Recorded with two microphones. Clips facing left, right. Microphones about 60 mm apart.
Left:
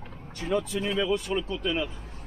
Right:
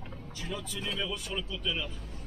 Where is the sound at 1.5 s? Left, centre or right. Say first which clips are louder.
Left 7 dB; left.